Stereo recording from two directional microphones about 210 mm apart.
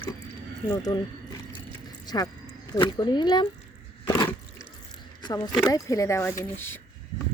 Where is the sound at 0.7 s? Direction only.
20° left (ahead or behind).